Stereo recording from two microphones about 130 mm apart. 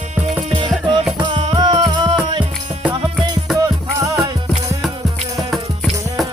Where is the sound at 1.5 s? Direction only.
35° right (ahead or behind).